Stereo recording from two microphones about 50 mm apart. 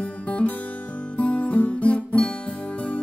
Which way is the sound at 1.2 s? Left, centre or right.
Left.